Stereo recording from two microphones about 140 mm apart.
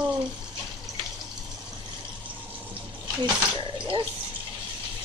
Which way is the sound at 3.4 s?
35° right (ahead or behind).